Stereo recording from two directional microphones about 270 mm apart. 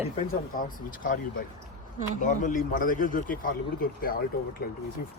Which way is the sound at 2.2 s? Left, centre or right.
Left.